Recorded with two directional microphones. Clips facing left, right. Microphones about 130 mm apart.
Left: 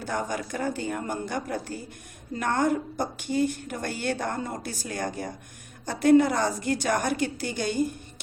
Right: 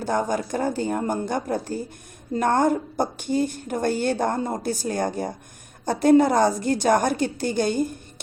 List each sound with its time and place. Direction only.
0.0 s a woman's voice: 35° right (ahead or behind)